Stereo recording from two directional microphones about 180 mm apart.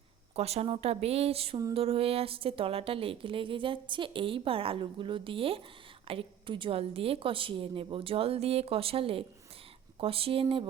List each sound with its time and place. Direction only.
0.3 s a woman's voice: 35° right (ahead or behind)